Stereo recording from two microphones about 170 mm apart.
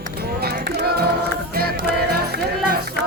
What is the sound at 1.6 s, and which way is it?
Music, 65° right (ahead or behind).